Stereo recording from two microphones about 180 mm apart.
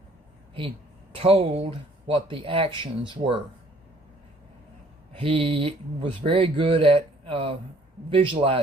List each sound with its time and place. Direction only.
1.1 s speech: 30° right (ahead or behind)
5.1 s speech: 30° right (ahead or behind)